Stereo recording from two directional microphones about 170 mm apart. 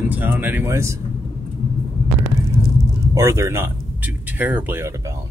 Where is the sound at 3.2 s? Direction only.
15° right (ahead or behind).